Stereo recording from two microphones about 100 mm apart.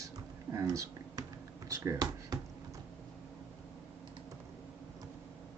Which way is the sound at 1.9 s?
40° right (ahead or behind).